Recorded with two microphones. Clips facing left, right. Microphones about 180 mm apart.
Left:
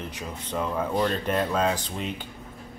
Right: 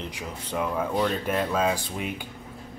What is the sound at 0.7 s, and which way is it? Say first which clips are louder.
Speech: left 1 dB; centre (ahead or behind).